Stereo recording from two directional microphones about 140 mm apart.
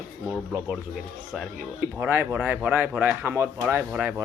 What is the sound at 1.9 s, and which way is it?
Speech, 15° right (ahead or behind).